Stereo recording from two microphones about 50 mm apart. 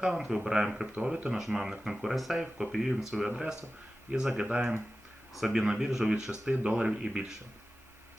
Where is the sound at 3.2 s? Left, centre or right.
Centre.